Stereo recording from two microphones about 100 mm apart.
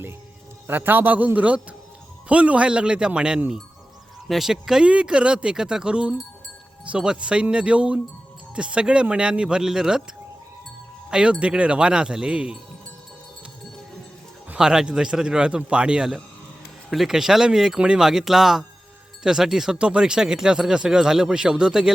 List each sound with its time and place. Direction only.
0.7 s speech: 20° right (ahead or behind)
11.1 s speech: 10° right (ahead or behind)
14.5 s speech: 5° right (ahead or behind)